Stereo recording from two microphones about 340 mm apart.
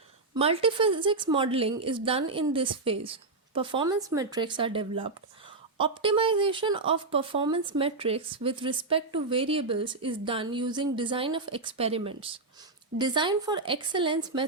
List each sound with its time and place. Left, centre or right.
0.3 s speech: centre